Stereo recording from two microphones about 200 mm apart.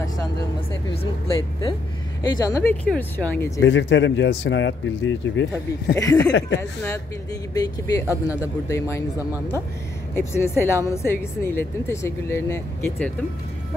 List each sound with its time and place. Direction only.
1.2 s a woman's voice: 25° left (ahead or behind)
3.6 s speech: 65° left (ahead or behind)
5.9 s a woman's voice: 15° left (ahead or behind)
7.5 s a woman's voice: 15° left (ahead or behind)
10.1 s a woman's voice: 10° left (ahead or behind)